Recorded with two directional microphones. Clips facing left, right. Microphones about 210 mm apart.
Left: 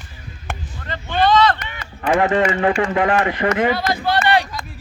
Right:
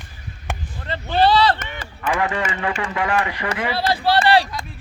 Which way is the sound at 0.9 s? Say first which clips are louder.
Even; 35° right (ahead or behind).